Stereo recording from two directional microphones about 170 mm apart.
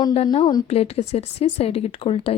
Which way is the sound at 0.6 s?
35° left (ahead or behind).